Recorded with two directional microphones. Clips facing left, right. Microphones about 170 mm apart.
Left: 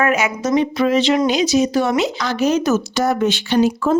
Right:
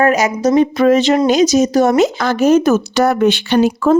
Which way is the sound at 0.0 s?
40° right (ahead or behind).